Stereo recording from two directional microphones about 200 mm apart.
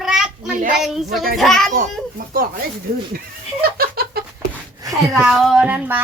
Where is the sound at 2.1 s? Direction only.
45° right (ahead or behind).